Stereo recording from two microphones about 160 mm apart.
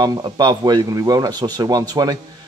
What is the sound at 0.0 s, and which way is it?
Speech, 25° right (ahead or behind).